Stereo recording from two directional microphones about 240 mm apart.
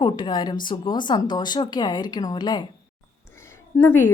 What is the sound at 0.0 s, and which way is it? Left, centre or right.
Speech, centre.